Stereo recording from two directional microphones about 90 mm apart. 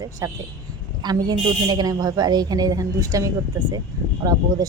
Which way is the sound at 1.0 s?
50° right (ahead or behind).